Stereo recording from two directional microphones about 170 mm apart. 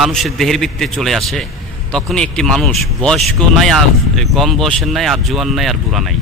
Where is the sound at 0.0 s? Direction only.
Centre (ahead or behind).